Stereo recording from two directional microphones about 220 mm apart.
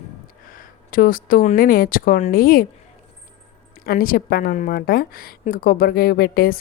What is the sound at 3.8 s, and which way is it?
A woman's voice, 40° left (ahead or behind).